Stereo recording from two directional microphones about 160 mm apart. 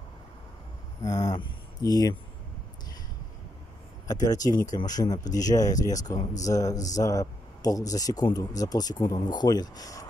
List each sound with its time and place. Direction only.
1.0 s speech: 20° left (ahead or behind)
4.1 s speech: 25° left (ahead or behind)